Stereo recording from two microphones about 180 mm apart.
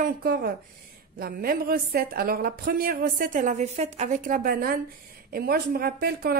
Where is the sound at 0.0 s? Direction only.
55° right (ahead or behind).